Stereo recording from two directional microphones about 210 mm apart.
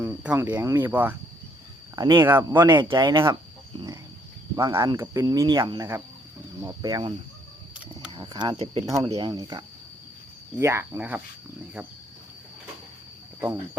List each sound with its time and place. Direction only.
0.0 s speech: 10° right (ahead or behind)
2.0 s speech: 20° right (ahead or behind)
2.2 s speech: 10° right (ahead or behind)
2.5 s speech: 20° right (ahead or behind)
4.5 s speech: 15° right (ahead or behind)
8.1 s speech: 25° right (ahead or behind)
8.9 s speech: 15° right (ahead or behind)